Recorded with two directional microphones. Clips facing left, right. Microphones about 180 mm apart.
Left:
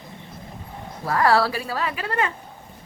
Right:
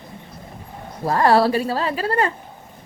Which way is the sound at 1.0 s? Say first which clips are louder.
Right 4 dB; 25° right (ahead or behind).